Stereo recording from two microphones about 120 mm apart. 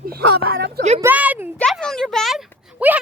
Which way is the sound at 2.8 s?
15° right (ahead or behind).